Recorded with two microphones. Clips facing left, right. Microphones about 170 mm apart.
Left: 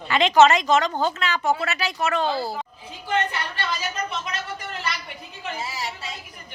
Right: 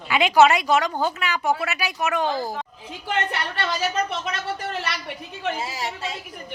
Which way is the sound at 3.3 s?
70° right (ahead or behind).